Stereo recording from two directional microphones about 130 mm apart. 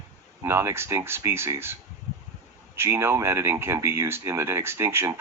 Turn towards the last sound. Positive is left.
turn(degrees=-20)  # may be behind; listen again after turning